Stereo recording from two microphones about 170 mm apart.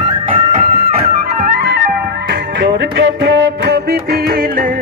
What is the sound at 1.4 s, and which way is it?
Flute, 65° right (ahead or behind).